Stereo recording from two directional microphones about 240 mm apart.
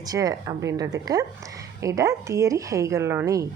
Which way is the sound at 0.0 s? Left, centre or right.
Centre.